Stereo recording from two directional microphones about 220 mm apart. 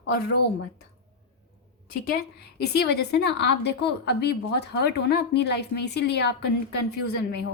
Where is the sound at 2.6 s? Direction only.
50° left (ahead or behind).